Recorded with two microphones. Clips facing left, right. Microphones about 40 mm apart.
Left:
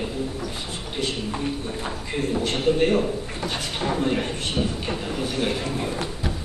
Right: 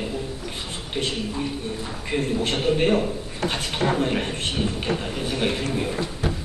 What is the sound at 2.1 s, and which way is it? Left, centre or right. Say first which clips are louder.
Speech: right 3 dB; right.